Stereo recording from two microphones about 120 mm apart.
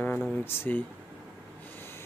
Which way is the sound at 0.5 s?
20° left (ahead or behind).